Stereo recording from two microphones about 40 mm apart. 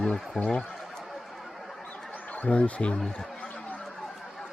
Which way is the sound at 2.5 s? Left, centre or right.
Left.